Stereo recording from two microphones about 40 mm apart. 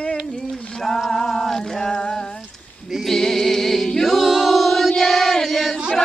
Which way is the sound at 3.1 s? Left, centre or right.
Centre.